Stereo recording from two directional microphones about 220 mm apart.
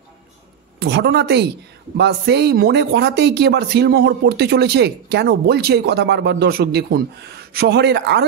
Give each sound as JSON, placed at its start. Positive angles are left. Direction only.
{"t": 0.7, "sound": "speech", "side_deg": -50}